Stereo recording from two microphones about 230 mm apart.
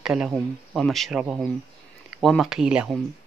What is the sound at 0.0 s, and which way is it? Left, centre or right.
Speech, centre.